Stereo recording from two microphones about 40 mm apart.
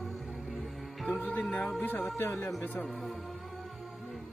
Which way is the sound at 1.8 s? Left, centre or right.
Left.